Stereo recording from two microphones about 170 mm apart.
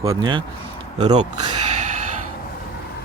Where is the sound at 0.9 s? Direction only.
40° right (ahead or behind).